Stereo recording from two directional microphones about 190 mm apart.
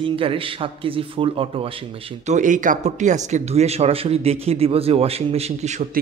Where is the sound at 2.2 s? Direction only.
40° right (ahead or behind).